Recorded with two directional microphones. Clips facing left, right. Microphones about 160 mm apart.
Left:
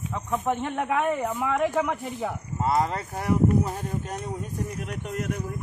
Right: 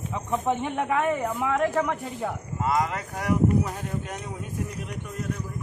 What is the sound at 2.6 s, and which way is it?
Speech, 30° left (ahead or behind).